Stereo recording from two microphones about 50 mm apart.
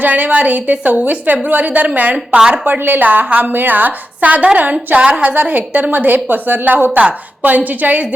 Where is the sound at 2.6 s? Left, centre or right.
Right.